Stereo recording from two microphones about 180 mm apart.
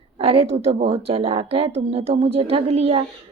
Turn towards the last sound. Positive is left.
turn(degrees=-35)  # may be behind; listen again after turning